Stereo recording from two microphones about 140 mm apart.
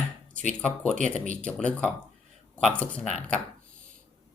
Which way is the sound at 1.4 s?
5° left (ahead or behind).